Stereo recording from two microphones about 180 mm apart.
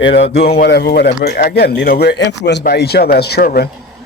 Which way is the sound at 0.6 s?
65° left (ahead or behind).